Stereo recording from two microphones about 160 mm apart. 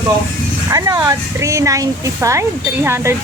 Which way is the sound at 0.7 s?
20° right (ahead or behind).